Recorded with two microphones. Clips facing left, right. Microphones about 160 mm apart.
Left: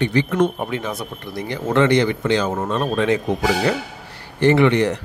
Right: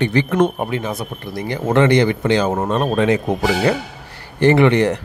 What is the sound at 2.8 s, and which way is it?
Speech, 45° right (ahead or behind).